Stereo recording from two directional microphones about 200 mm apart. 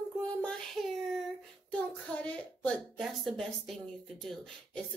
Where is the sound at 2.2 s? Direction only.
5° left (ahead or behind).